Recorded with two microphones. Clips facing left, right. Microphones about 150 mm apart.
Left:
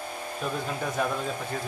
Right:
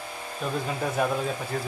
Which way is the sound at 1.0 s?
5° right (ahead or behind).